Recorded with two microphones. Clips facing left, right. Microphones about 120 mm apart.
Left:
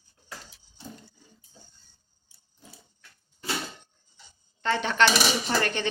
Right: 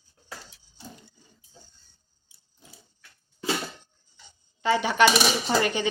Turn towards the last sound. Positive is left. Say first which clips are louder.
# right 3 dB
turn(degrees=-10)  # may be behind; listen again after turning